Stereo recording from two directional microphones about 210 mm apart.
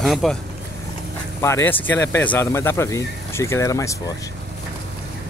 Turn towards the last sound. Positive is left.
turn(degrees=15)  # may be behind; listen again after turning